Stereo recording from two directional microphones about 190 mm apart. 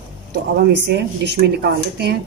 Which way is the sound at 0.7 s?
65° right (ahead or behind).